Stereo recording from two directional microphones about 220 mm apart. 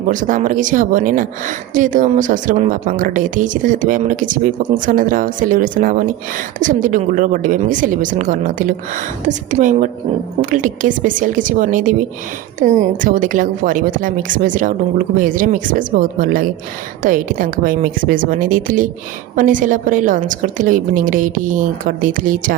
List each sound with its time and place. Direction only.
0.1 s a woman's voice: 35° right (ahead or behind)